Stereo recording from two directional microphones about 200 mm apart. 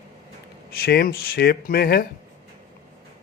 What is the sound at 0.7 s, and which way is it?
A man's voice, 50° left (ahead or behind).